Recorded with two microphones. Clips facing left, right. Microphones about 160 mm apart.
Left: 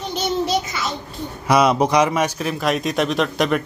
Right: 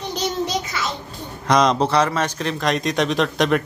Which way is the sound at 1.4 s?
10° left (ahead or behind).